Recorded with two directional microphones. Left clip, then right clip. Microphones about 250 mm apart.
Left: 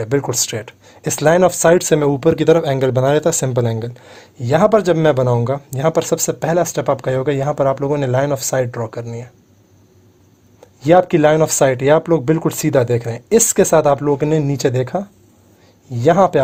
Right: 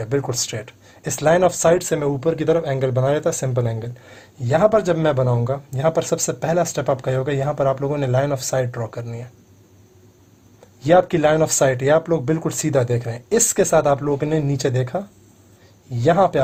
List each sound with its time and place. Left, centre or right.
0.0 s speech: left
10.8 s speech: left